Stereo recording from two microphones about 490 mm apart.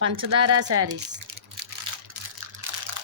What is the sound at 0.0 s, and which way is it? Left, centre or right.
A woman's voice, right.